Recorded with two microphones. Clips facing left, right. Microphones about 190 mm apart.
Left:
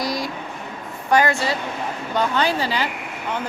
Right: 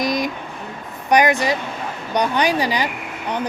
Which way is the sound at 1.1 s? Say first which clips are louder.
Right 2 dB; 15° right (ahead or behind).